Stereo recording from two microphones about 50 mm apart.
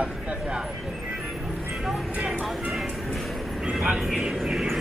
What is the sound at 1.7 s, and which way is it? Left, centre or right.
Vehicle, centre.